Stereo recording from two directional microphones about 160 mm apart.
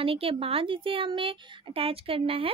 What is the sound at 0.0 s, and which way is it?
Speech, 35° right (ahead or behind).